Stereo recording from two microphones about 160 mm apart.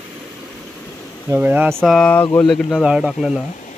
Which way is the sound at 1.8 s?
5° left (ahead or behind).